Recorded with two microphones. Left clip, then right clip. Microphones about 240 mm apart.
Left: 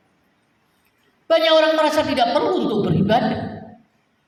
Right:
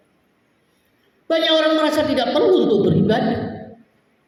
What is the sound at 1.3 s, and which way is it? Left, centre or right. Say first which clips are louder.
Speech: left 2 dB; left.